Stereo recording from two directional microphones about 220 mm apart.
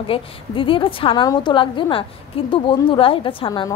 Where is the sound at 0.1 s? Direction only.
25° left (ahead or behind).